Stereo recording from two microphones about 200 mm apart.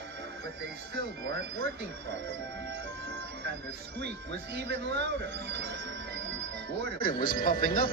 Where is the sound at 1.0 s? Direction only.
60° right (ahead or behind).